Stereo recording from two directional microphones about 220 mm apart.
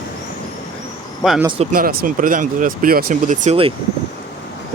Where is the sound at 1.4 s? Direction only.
25° right (ahead or behind).